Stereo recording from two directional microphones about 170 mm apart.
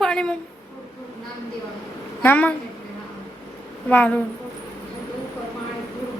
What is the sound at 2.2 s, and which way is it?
Speech, 10° left (ahead or behind).